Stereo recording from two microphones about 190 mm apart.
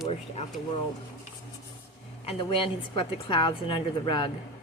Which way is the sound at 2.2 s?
30° left (ahead or behind).